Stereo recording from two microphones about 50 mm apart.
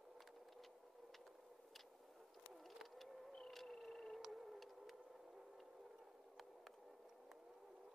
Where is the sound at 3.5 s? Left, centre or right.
Centre.